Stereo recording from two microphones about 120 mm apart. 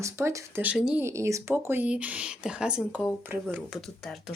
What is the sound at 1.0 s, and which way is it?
Speech, 25° right (ahead or behind).